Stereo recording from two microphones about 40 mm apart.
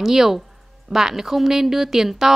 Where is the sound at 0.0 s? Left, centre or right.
Centre.